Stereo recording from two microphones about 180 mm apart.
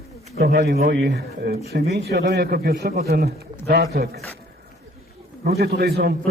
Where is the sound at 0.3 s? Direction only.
65° right (ahead or behind).